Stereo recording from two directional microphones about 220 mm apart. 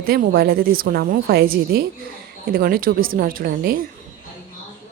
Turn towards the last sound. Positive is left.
turn(degrees=-40)  # may be behind; listen again after turning